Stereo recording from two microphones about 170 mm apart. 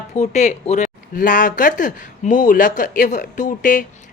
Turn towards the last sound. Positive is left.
turn(degrees=50)  # may be behind; listen again after turning